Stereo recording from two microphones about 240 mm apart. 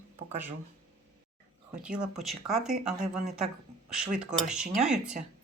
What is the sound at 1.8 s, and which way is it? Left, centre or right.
Speech, centre.